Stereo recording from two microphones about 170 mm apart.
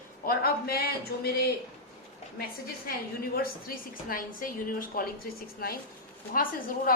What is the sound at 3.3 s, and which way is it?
Speech, 60° left (ahead or behind).